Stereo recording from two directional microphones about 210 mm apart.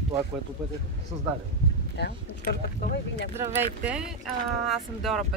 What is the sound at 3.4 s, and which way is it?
Speech, 10° right (ahead or behind).